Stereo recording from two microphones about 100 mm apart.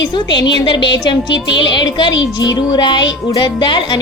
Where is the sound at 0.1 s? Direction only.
50° left (ahead or behind).